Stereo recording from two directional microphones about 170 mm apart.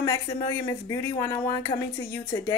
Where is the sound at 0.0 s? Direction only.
20° left (ahead or behind).